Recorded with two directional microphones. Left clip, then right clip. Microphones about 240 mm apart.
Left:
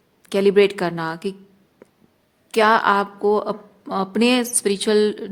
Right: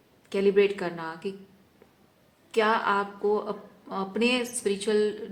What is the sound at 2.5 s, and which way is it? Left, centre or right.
A woman's voice, left.